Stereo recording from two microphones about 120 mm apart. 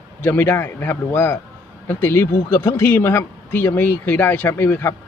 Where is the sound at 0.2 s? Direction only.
20° left (ahead or behind).